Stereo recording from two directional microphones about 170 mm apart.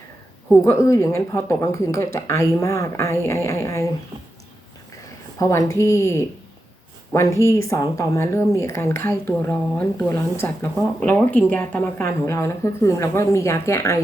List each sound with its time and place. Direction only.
0.6 s speech: 15° left (ahead or behind)
5.4 s speech: 15° left (ahead or behind)